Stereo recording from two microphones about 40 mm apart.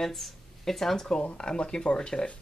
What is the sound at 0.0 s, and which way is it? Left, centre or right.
A woman's voice, centre.